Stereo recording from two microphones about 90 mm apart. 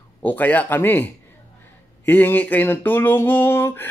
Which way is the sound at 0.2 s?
20° left (ahead or behind).